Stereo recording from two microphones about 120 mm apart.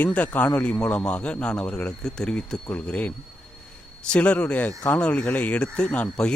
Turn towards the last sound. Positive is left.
turn(degrees=10)  # may be behind; listen again after turning